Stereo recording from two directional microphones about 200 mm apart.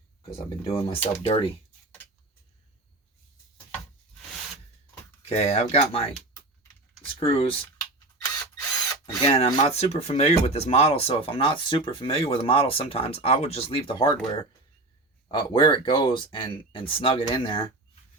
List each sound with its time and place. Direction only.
0.2 s speech: 25° left (ahead or behind)
5.3 s speech: 30° left (ahead or behind)
7.1 s speech: 30° left (ahead or behind)
9.0 s speech: 30° left (ahead or behind)
15.3 s speech: 25° left (ahead or behind)